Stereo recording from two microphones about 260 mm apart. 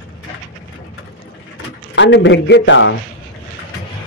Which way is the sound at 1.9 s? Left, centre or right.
Left.